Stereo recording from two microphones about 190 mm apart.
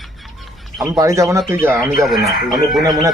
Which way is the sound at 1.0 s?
15° right (ahead or behind).